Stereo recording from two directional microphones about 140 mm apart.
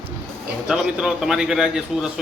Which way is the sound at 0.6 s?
5° right (ahead or behind).